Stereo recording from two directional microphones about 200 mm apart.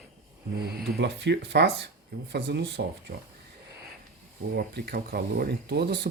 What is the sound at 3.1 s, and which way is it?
Speech, 45° right (ahead or behind).